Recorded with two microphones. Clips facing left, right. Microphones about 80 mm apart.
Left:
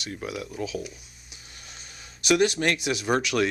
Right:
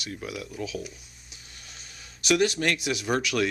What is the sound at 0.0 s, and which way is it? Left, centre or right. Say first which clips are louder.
Speech: left 2 dB; left.